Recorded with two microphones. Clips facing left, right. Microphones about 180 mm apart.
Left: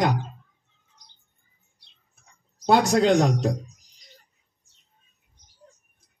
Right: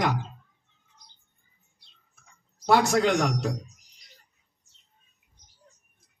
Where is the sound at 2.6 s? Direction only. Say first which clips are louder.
Left 3 dB; 20° left (ahead or behind).